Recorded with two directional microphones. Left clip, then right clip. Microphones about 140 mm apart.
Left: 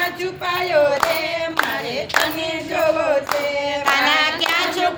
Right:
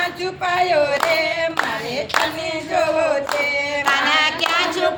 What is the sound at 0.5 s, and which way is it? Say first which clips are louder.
Singing: right 1 dB; 15° right (ahead or behind).